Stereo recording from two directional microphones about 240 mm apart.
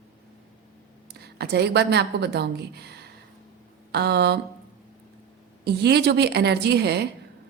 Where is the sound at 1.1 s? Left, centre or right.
Right.